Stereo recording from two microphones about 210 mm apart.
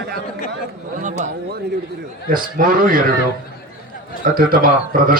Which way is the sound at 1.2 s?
35° right (ahead or behind).